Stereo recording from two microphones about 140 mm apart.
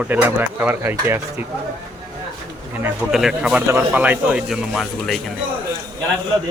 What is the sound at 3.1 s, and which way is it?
Speech, 5° right (ahead or behind).